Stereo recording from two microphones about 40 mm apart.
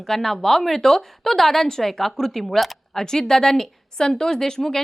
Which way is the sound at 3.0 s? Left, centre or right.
Centre.